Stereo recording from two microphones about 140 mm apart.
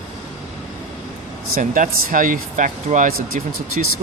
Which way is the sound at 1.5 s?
70° right (ahead or behind).